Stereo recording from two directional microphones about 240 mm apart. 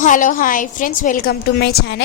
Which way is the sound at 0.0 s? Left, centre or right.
Left.